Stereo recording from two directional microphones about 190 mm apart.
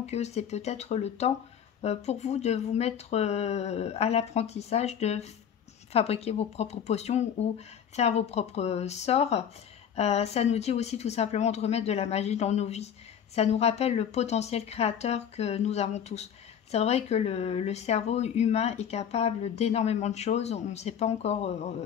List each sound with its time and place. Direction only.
0.0 s speech: 35° left (ahead or behind)